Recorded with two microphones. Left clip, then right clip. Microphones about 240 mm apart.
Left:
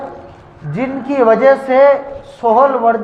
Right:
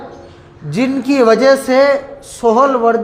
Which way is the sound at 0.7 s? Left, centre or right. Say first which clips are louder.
Right 3 dB; right.